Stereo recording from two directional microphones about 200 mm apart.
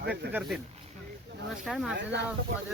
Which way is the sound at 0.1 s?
5° right (ahead or behind).